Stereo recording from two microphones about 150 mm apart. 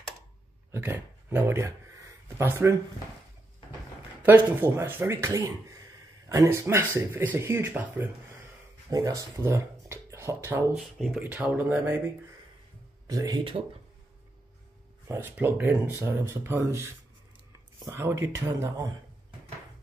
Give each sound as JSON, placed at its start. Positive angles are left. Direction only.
{"t": 0.7, "sound": "speech", "side_deg": -15}
{"t": 4.2, "sound": "speech", "side_deg": -15}
{"t": 8.9, "sound": "speech", "side_deg": -20}
{"t": 11.0, "sound": "speech", "side_deg": 0}
{"t": 13.0, "sound": "speech", "side_deg": -25}
{"t": 15.0, "sound": "speech", "side_deg": -15}
{"t": 17.8, "sound": "speech", "side_deg": -20}